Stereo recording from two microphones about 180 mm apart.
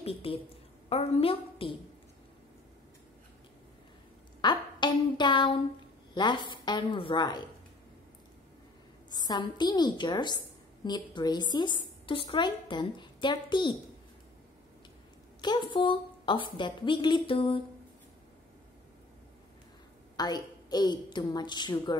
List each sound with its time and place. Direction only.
0.0 s a woman's voice: 30° left (ahead or behind)
4.4 s a sound: 25° left (ahead or behind)
6.1 s a woman's voice: 25° left (ahead or behind)
9.1 s a woman's voice: 25° left (ahead or behind)
15.4 s a woman's voice: 25° left (ahead or behind)
20.2 s a woman's voice: 20° left (ahead or behind)